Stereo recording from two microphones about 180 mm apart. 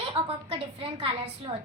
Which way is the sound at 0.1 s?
30° right (ahead or behind).